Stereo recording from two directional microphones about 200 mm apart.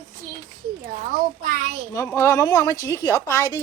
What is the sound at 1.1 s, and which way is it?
Speech, 45° right (ahead or behind).